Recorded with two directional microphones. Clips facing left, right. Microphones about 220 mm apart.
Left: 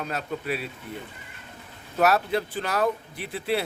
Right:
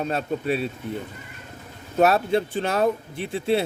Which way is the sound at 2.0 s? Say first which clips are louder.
Right 3 dB; 25° right (ahead or behind).